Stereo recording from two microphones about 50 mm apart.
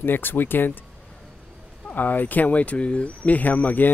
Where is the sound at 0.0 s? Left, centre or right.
Left.